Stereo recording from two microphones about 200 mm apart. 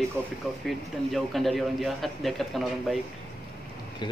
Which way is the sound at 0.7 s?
Centre (ahead or behind).